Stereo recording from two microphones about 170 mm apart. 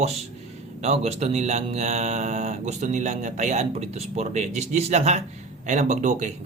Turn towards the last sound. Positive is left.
turn(degrees=-45)  # may be behind; listen again after turning